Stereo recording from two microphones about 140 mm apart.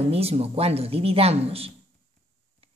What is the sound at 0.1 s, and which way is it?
Speech, 45° right (ahead or behind).